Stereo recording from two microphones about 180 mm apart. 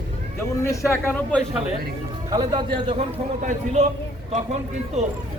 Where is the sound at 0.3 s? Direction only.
15° left (ahead or behind).